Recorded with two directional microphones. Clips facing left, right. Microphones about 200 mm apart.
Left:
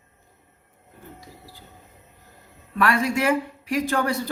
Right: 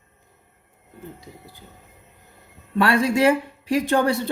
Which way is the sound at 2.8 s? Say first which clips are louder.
Right 4 dB; 30° right (ahead or behind).